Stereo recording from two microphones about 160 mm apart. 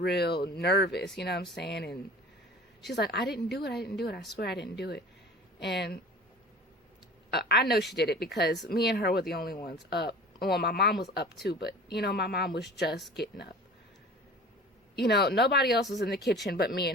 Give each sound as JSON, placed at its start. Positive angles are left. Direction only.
{"t": 0.0, "sound": "speech", "side_deg": 90}
{"t": 7.3, "sound": "speech", "side_deg": 90}
{"t": 8.7, "sound": "speech", "side_deg": 75}
{"t": 9.9, "sound": "speech", "side_deg": 90}
{"t": 14.9, "sound": "speech", "side_deg": 90}